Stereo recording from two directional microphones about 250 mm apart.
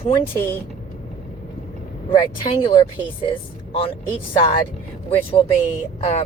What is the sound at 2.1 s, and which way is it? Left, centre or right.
Speech, centre.